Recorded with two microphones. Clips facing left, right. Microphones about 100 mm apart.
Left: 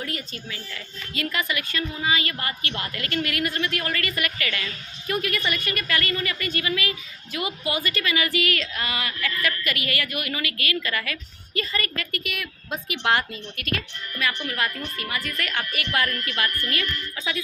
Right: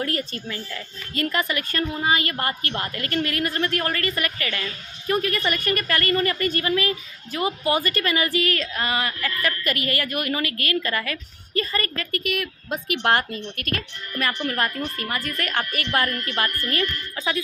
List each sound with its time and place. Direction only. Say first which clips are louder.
0.0 s a woman's voice: right 6 dB; 45° right (ahead or behind)